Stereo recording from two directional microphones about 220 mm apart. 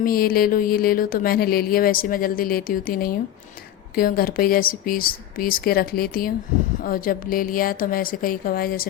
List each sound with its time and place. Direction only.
0.0 s speech: 40° left (ahead or behind)